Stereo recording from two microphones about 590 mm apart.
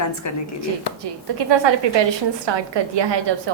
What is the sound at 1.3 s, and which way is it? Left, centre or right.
A woman's voice, right.